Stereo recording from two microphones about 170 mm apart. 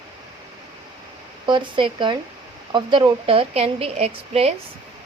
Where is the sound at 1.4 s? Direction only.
30° right (ahead or behind).